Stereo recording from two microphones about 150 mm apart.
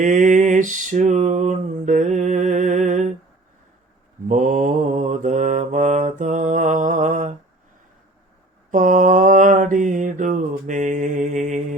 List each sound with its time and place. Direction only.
0.0 s a sound: 55° right (ahead or behind)
4.3 s mantra: 55° right (ahead or behind)
8.7 s mantra: 60° right (ahead or behind)